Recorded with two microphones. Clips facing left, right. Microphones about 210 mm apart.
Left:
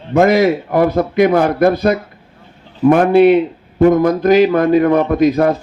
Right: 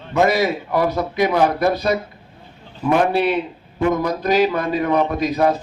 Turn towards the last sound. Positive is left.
turn(degrees=50)  # may be behind; listen again after turning